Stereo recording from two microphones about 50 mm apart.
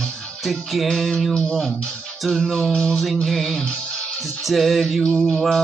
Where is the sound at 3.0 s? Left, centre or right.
Centre.